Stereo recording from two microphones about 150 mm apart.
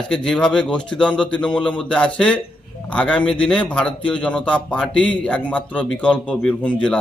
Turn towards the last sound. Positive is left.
turn(degrees=10)  # may be behind; listen again after turning